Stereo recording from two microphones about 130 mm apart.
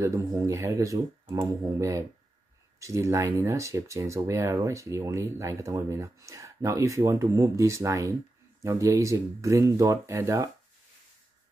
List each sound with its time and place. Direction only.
0.0 s speech: 20° right (ahead or behind)